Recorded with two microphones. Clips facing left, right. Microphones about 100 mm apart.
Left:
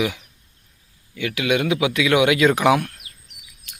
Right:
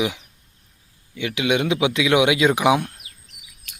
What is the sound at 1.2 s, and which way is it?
Speech, 20° right (ahead or behind).